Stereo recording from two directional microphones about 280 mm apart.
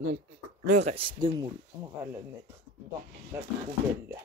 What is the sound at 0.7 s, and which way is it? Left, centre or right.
Speech, right.